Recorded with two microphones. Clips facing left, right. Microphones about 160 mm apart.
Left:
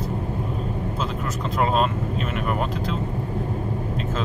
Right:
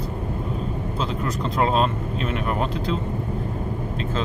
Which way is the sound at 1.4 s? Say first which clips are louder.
Even; 5° left (ahead or behind).